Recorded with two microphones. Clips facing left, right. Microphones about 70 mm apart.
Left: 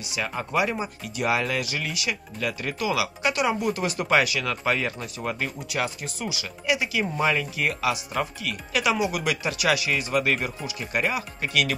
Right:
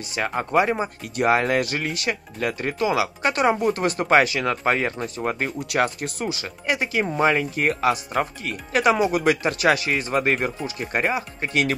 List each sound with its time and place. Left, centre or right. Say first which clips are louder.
0.1 s speech: right 5 dB; right
5.6 s speech: right 6 dB; right